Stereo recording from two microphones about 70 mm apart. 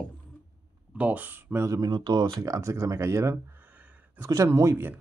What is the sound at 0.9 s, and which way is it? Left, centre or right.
Speech, right.